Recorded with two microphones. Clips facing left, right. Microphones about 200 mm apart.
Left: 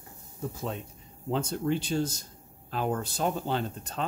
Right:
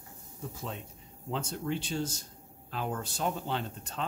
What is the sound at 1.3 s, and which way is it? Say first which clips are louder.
Speech: left 5 dB; 40° left (ahead or behind).